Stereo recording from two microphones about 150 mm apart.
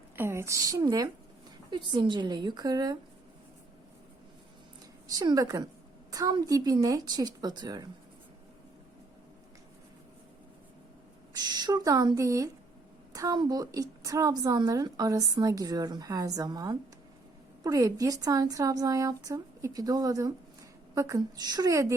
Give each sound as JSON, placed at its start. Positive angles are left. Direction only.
{"t": 0.2, "sound": "a woman's voice", "side_deg": -15}
{"t": 5.0, "sound": "a woman's voice", "side_deg": -25}
{"t": 11.3, "sound": "a woman's voice", "side_deg": -30}